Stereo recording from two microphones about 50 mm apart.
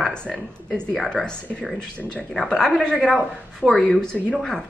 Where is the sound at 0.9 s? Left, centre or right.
Centre.